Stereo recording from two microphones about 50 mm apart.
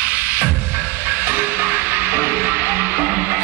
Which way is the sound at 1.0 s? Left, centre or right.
Right.